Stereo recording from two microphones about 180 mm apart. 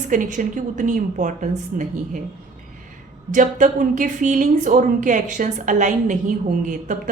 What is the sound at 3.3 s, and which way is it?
Speech, 45° right (ahead or behind).